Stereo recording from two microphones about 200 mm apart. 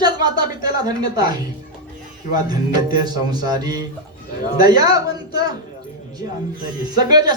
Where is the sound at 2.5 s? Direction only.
20° right (ahead or behind).